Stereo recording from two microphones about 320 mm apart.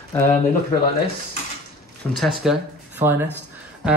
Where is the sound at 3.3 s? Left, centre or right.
Centre.